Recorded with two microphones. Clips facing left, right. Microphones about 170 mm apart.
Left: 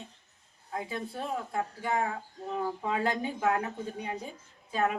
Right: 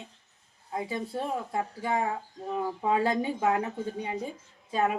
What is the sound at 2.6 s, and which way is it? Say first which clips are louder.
Speech: right 4 dB; 30° right (ahead or behind).